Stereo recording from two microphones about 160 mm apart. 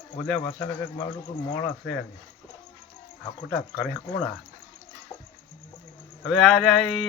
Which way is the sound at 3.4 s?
5° left (ahead or behind).